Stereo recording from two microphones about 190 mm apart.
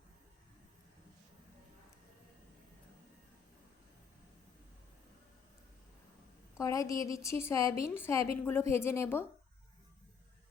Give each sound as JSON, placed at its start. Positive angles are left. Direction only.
{"t": 6.6, "sound": "a woman's voice", "side_deg": 15}